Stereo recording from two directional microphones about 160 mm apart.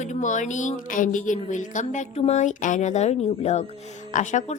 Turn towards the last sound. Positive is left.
turn(degrees=50)  # may be behind; listen again after turning